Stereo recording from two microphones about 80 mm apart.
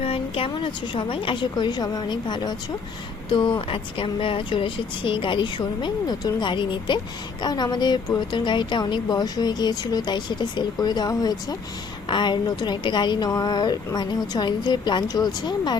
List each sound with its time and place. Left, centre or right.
0.4 s a woman's voice: left
3.2 s speech: left
7.4 s speech: left
12.0 s a woman's voice: left